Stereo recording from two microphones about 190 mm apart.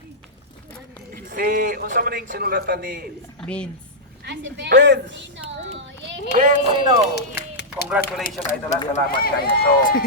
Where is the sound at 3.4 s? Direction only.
5° left (ahead or behind).